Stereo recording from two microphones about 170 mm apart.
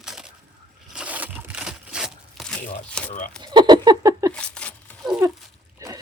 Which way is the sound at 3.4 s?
25° right (ahead or behind).